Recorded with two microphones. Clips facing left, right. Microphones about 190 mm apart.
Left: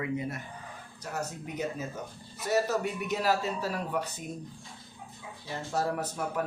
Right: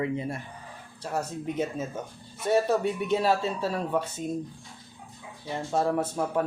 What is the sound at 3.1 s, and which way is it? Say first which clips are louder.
Speech: right 3 dB; 30° right (ahead or behind).